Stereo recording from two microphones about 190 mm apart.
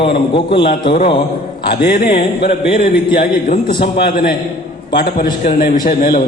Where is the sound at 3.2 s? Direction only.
45° left (ahead or behind).